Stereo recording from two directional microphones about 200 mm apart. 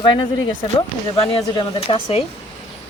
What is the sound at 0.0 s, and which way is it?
Speech, 20° left (ahead or behind).